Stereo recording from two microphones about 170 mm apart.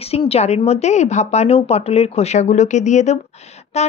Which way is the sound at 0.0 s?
35° left (ahead or behind).